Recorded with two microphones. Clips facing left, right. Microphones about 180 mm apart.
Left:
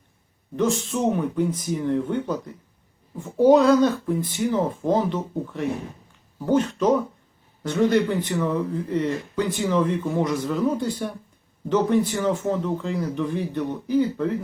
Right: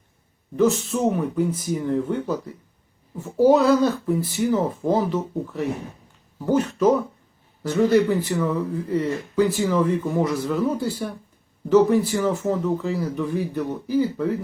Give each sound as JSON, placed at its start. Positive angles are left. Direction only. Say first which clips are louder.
{"t": 0.5, "sound": "speech", "louder": "right 3 dB", "side_deg": -5}